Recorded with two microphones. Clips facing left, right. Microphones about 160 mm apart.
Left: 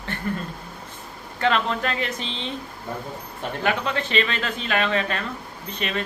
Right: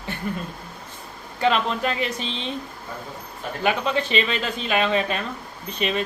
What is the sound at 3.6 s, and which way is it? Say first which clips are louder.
Speech: right 2 dB; 20° right (ahead or behind).